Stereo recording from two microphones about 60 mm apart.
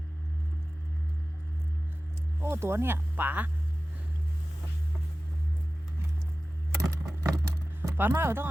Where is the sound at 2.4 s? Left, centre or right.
Right.